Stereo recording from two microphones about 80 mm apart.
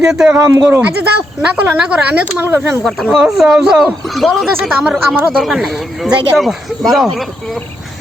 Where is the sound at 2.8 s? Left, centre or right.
Centre.